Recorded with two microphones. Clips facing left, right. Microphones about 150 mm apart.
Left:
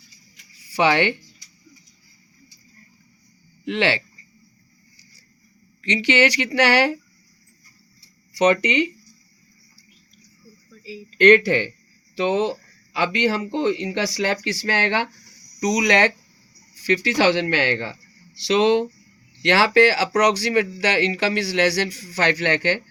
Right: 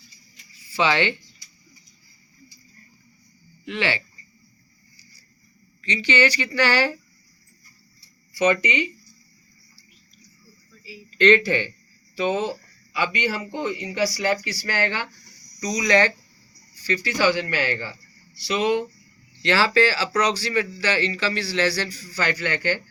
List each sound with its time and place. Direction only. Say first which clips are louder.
0.6 s speech: left 3 dB; 65° left (ahead or behind)
3.7 s speech: left 5 dB; 70° left (ahead or behind)
5.8 s speech: left 3 dB; 80° left
8.3 s speech: left 3 dB; 65° left (ahead or behind)
11.2 s speech: left 3 dB; 60° left (ahead or behind)
12.1 s speech: left 3 dB; 70° left (ahead or behind)
18.3 s speech: left 5 dB; 90° left
19.4 s speech: left 4 dB; 65° left (ahead or behind)